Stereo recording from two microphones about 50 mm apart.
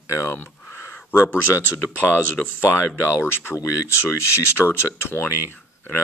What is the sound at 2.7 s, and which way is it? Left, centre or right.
Speech, left.